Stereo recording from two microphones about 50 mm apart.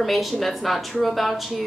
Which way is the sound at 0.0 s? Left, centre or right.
Centre.